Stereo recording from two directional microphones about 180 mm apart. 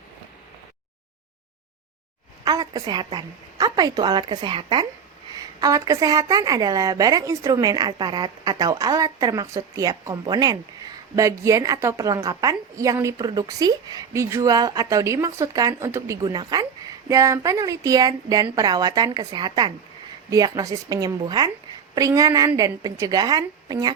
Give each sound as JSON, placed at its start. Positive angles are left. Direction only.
{"t": 2.4, "sound": "a woman's voice", "side_deg": -20}